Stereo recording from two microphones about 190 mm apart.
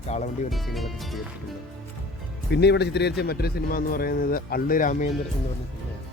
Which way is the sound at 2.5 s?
60° left (ahead or behind).